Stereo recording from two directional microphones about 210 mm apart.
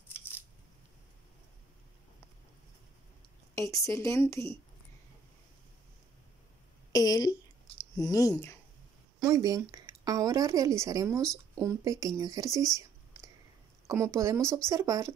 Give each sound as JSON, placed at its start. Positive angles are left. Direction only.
{"t": 3.5, "sound": "a woman's voice", "side_deg": 15}
{"t": 6.9, "sound": "a woman's voice", "side_deg": 15}
{"t": 9.2, "sound": "a woman's voice", "side_deg": -15}